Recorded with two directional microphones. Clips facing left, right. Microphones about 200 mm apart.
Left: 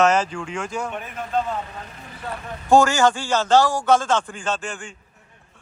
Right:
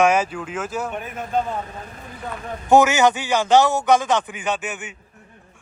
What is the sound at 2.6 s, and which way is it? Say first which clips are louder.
A man's voice: right 1 dB; 20° right (ahead or behind).